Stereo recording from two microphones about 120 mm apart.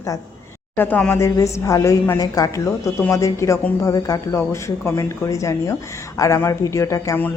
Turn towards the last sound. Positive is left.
turn(degrees=25)  # may be behind; listen again after turning